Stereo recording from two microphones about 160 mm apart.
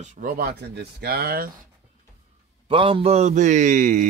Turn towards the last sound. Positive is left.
turn(degrees=-55)  # may be behind; listen again after turning